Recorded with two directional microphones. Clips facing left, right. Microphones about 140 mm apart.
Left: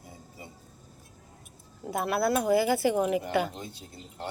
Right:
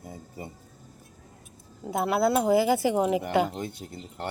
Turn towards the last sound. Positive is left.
turn(degrees=-70)  # may be behind; listen again after turning